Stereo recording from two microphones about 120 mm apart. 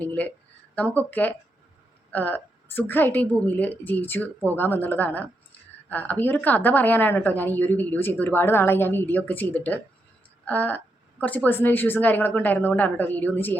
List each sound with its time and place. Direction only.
0.0 s a woman's voice: 15° left (ahead or behind)